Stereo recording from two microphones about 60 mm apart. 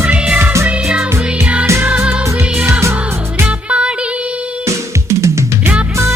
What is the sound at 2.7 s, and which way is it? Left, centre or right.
Music, right.